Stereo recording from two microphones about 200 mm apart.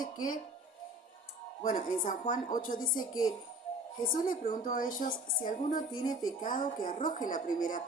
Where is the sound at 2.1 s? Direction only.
40° left (ahead or behind).